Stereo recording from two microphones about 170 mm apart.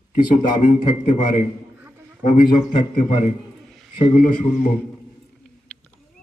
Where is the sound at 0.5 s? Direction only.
50° left (ahead or behind).